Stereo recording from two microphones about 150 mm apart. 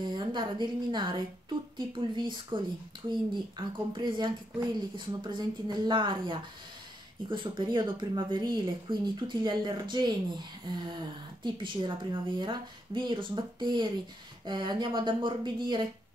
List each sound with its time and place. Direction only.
0.0 s a woman's voice: 30° right (ahead or behind)